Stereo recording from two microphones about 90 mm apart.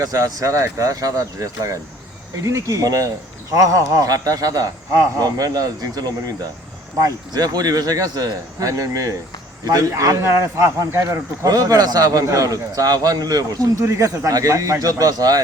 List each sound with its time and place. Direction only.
0.0 s a man's voice: 40° right (ahead or behind)